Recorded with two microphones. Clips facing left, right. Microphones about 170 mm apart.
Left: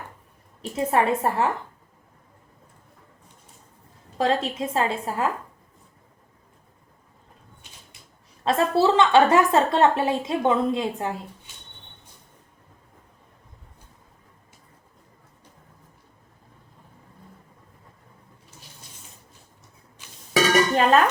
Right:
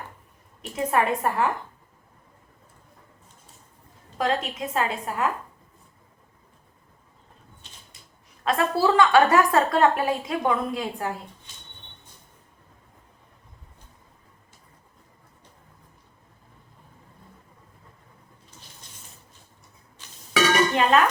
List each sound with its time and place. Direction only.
0.6 s a woman's voice: 30° left (ahead or behind)
4.2 s a woman's voice: 30° left (ahead or behind)
8.4 s a woman's voice: 25° left (ahead or behind)
18.8 s a sound: 10° left (ahead or behind)
20.3 s dishes: 40° left (ahead or behind)